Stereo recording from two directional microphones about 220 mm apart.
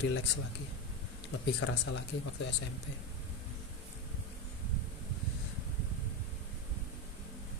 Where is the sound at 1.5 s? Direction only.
80° left.